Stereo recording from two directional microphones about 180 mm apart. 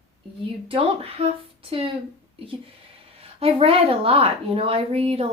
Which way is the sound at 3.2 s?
30° right (ahead or behind).